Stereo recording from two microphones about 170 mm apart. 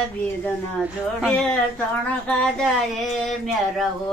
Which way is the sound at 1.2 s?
5° left (ahead or behind).